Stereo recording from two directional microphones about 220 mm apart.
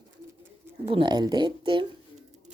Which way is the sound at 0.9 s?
20° right (ahead or behind).